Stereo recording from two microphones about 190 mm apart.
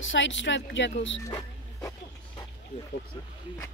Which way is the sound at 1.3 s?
15° left (ahead or behind).